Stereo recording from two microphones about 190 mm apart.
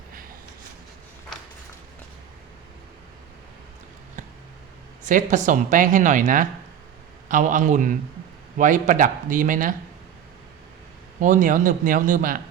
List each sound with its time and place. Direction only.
5.0 s speech: 40° right (ahead or behind)
11.2 s speech: 45° right (ahead or behind)